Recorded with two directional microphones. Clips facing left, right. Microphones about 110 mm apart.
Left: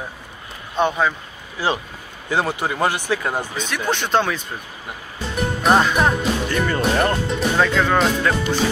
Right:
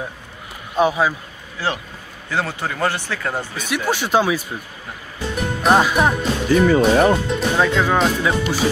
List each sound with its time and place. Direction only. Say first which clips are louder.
0.7 s speech: right 2 dB; 5° right (ahead or behind)
1.6 s speech: left 2 dB; 15° left (ahead or behind)
3.5 s speech: right 1 dB; 10° right (ahead or behind)